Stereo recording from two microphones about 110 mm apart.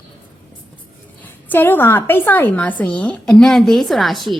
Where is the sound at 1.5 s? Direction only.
20° left (ahead or behind).